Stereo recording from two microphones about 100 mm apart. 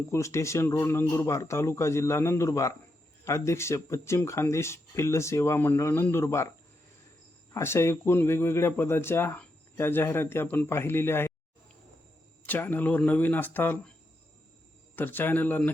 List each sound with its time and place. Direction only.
0.1 s speech: 30° left (ahead or behind)
7.5 s speech: 25° left (ahead or behind)
12.5 s speech: 20° left (ahead or behind)
14.9 s speech: 20° left (ahead or behind)